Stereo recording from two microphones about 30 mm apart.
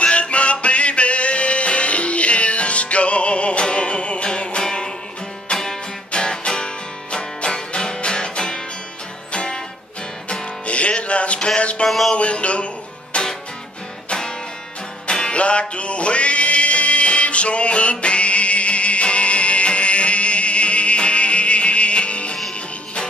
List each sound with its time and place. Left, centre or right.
0.0 s music: left
4.6 s music: left
5.5 s music: left
10.7 s music: left
11.3 s a sound: left
12.2 s a sound: left
13.1 s music: left
15.0 s music: left
15.3 s music: left